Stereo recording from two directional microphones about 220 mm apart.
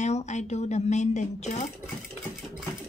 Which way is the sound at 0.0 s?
30° left (ahead or behind).